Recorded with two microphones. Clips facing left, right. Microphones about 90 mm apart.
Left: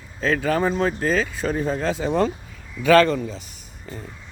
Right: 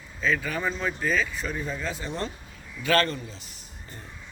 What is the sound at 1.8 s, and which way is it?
Speech, 90° left.